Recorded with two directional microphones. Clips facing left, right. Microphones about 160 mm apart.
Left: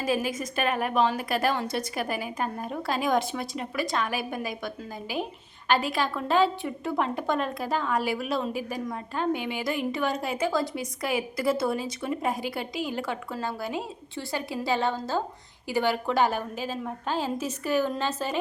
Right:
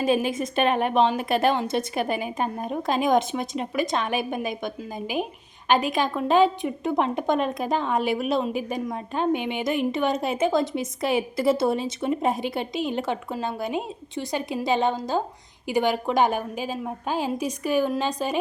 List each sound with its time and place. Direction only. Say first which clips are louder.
0.0 s a woman's voice: right 5 dB; 25° right (ahead or behind)